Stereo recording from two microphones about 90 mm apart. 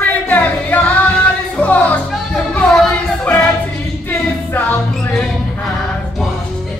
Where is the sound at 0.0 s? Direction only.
20° left (ahead or behind).